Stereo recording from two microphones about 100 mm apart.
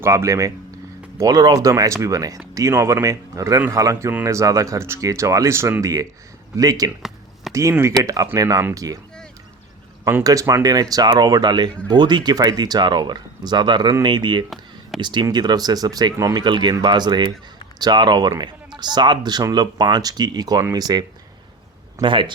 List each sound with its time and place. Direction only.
0.0 s speech: 30° right (ahead or behind)
10.2 s speech: 35° right (ahead or behind); by 14.4 s 50° right (ahead or behind)
14.5 s a sound: centre (ahead or behind)
15.0 s speech: 50° right (ahead or behind)
16.4 s speech: 50° right (ahead or behind)
22.0 s speech: 55° right (ahead or behind)